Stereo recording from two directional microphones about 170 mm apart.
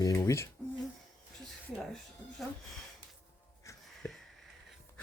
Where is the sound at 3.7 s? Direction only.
20° left (ahead or behind).